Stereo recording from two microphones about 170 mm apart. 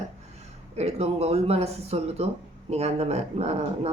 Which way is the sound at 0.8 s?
40° right (ahead or behind).